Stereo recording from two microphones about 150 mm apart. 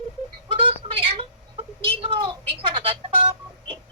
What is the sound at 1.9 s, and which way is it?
Telephone dialing, 35° right (ahead or behind).